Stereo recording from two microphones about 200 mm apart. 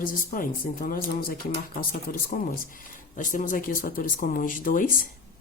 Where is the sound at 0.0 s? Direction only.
45° left (ahead or behind).